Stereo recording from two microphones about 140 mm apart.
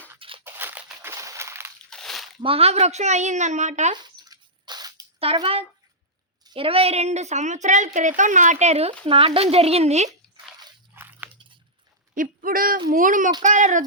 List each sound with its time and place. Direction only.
0.4 s crushing: 15° right (ahead or behind)
1.9 s crunch: 5° left (ahead or behind)
2.4 s speech: 45° right (ahead or behind)
3.9 s a sound: 30° right (ahead or behind)
5.2 s a woman's voice: 45° right (ahead or behind)
10.9 s biting: 15° right (ahead or behind)
12.1 s a sound: 80° right
12.9 s a sound: 75° right (ahead or behind)
13.4 s speech: 60° right (ahead or behind)